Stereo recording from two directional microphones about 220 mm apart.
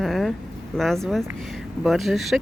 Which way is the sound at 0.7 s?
Centre (ahead or behind).